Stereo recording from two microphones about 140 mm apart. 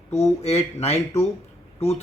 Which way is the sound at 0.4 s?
50° left (ahead or behind).